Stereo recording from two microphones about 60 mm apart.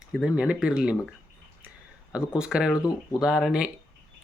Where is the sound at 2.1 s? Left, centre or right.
Centre.